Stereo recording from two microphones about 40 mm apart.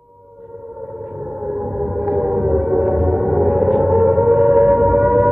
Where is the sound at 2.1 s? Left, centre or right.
Centre.